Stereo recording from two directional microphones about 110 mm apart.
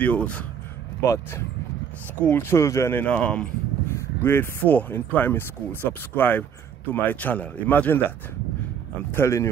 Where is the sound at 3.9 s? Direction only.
20° left (ahead or behind).